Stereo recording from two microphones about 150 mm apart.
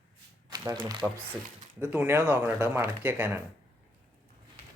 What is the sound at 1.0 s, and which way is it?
Speech, 5° right (ahead or behind).